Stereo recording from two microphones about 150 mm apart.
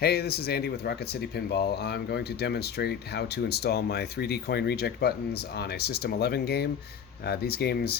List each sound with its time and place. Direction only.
0.0 s speech: 90° left